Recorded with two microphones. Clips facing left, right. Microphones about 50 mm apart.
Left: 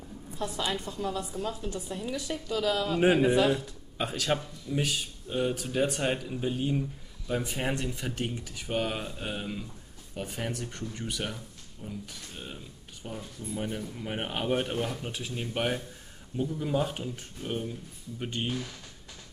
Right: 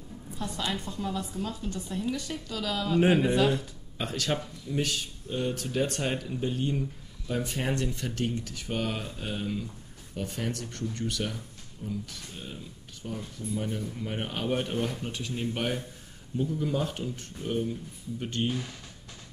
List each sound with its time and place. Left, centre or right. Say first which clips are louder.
0.4 s a woman's voice: left 1 dB; centre